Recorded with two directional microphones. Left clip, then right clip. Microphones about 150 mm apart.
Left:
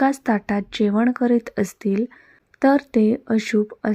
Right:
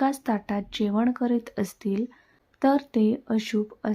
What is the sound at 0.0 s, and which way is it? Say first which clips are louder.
Speech: left 6 dB; 25° left (ahead or behind).